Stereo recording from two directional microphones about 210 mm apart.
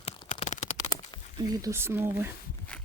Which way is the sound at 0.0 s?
25° left (ahead or behind).